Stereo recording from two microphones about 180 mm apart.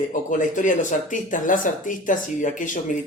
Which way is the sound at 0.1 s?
45° left (ahead or behind).